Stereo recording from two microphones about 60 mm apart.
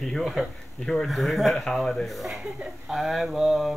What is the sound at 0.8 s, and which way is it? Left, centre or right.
A man's voice, centre.